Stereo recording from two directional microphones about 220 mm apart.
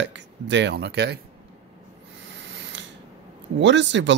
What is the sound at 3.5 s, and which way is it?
Speech, 55° right (ahead or behind).